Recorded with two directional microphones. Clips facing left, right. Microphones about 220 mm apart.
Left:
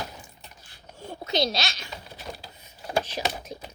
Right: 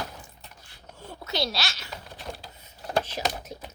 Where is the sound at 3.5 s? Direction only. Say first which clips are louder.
Left 1 dB; 15° left (ahead or behind).